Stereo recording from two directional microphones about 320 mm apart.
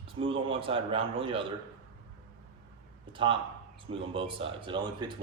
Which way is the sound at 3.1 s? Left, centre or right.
Centre.